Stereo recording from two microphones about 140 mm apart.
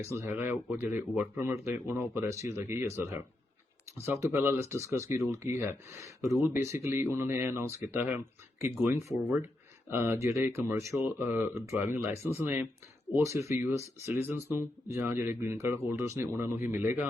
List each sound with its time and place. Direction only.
0.0 s speech: 20° right (ahead or behind)